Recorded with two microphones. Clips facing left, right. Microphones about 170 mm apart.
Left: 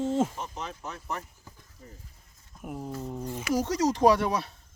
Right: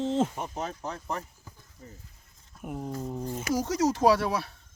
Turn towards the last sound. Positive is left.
turn(degrees=-5)  # may be behind; listen again after turning